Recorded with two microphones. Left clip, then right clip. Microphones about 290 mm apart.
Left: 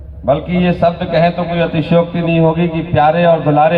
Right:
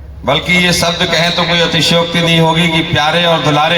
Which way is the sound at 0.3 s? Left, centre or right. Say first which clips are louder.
Right 4 dB; right.